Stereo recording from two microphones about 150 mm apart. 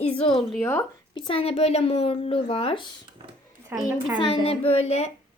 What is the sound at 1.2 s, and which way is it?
Speech, 35° left (ahead or behind).